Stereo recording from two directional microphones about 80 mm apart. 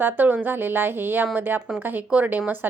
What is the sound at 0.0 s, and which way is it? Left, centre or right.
A woman's voice, right.